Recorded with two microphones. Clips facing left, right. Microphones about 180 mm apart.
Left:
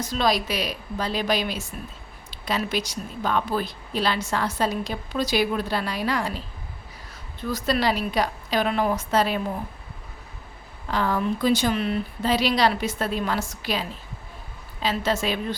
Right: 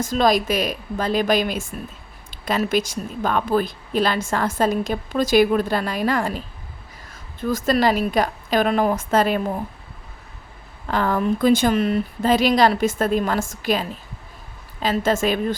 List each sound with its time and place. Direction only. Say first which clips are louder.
0.0 s speech: right 5 dB; 45° right (ahead or behind)
7.5 s speech: right 5 dB; 45° right (ahead or behind)
10.9 s speech: right 4 dB; 50° right (ahead or behind)